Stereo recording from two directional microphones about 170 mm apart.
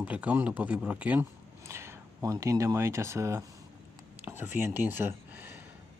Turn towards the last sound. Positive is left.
turn(degrees=-10)  # may be behind; listen again after turning